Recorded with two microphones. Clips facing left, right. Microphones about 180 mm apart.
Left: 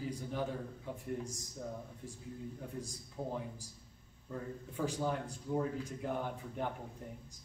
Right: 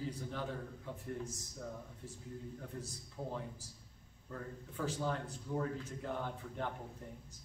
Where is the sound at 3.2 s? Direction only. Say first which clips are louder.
Left 3 dB; 25° left (ahead or behind).